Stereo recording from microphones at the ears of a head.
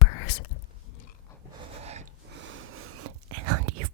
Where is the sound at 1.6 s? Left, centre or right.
Right.